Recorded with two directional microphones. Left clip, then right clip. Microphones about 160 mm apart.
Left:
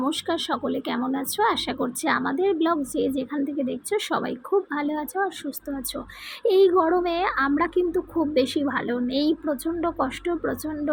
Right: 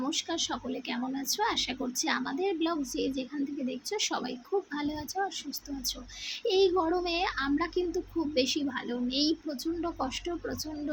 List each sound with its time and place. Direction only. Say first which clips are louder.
0.0 s a child's voice: left 6 dB; 30° left (ahead or behind)
6.4 s a child's voice: left 8 dB; 25° left (ahead or behind)